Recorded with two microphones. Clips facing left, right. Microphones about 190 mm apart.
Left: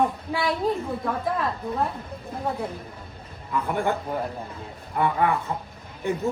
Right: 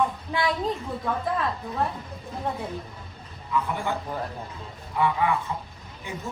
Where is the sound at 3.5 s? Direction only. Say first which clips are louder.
Left 3 dB; 55° left (ahead or behind).